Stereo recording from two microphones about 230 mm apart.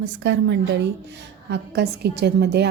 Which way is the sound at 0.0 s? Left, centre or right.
Right.